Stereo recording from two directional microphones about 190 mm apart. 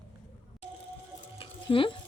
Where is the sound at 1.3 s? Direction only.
30° left (ahead or behind).